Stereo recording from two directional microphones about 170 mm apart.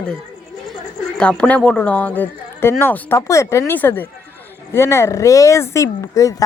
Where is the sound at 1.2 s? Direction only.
5° left (ahead or behind).